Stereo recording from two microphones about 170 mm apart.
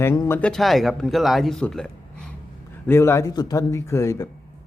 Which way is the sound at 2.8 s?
15° left (ahead or behind).